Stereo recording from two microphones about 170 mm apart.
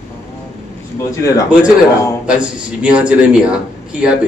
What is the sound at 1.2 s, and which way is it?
Speech, 20° left (ahead or behind).